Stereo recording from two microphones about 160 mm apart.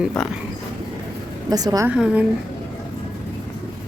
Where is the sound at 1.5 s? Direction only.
25° right (ahead or behind).